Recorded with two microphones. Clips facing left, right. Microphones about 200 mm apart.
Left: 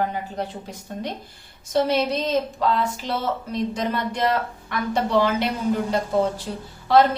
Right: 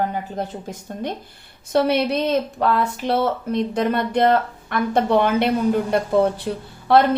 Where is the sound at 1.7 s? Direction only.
60° right (ahead or behind).